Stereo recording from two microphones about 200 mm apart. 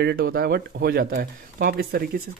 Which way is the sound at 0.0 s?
50° right (ahead or behind).